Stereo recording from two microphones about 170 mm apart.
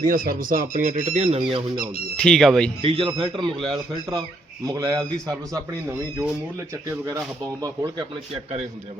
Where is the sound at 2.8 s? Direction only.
30° right (ahead or behind).